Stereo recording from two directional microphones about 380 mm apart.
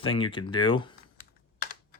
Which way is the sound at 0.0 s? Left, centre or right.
Centre.